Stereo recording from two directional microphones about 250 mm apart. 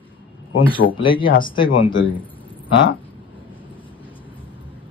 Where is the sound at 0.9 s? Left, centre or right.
Centre.